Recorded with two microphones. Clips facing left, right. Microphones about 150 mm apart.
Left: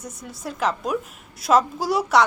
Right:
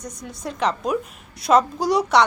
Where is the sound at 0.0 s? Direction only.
5° left (ahead or behind).